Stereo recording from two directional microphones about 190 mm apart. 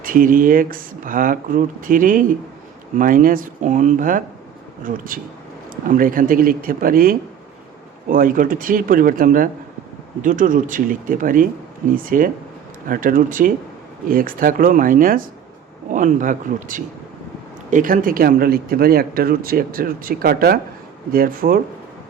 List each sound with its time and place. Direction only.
0.0 s speech: 45° right (ahead or behind)